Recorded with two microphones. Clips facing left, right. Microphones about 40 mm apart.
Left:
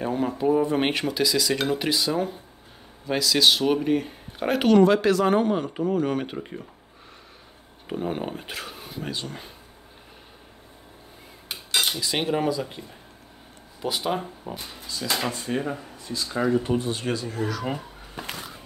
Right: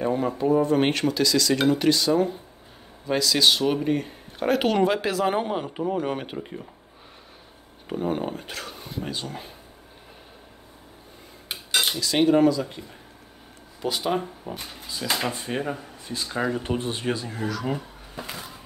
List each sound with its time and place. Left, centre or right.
0.0 s speech: centre
4.6 s speech: centre
6.3 s speech: centre
7.9 s speech: centre
11.7 s cutlery: centre
12.0 s speech: centre
15.0 s speech: centre
16.6 s speech: right
16.9 s speech: right
17.4 s speech: centre